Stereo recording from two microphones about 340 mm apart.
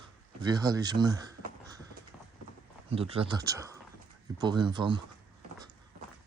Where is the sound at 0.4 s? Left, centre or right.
Centre.